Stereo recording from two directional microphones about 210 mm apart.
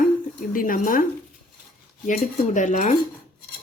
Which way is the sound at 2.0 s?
35° left (ahead or behind).